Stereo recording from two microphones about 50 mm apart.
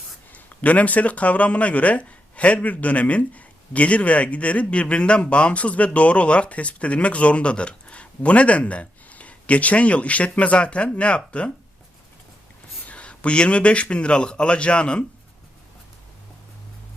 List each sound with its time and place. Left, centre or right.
0.3 s speech: left
12.8 s speech: left